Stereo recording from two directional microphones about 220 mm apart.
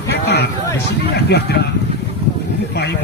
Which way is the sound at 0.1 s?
50° left (ahead or behind).